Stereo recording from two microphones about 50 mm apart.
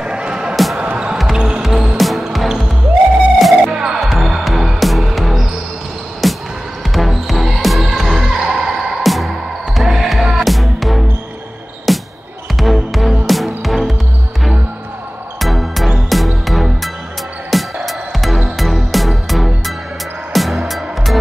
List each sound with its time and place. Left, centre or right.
0.0 s music: centre
3.7 s music: centre
4.0 s music: centre
15.3 s music: centre